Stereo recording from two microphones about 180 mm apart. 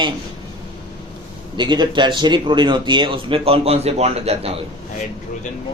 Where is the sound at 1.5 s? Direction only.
25° right (ahead or behind).